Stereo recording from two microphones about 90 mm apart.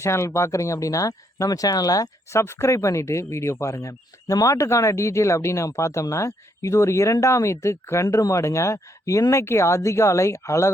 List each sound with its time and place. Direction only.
0.0 s speech: 30° left (ahead or behind)